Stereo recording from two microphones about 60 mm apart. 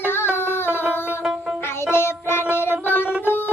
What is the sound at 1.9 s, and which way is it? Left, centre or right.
Music, left.